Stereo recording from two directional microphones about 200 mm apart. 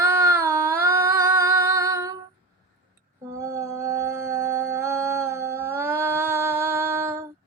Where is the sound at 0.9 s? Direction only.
15° right (ahead or behind).